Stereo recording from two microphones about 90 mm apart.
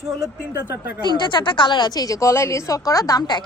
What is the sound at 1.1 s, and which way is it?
A woman's voice, 60° left (ahead or behind).